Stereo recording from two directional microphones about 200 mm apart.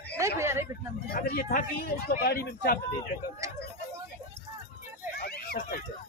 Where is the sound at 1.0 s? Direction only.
50° left (ahead or behind).